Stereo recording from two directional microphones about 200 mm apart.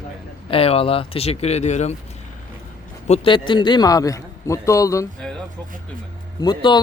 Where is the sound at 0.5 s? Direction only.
30° left (ahead or behind).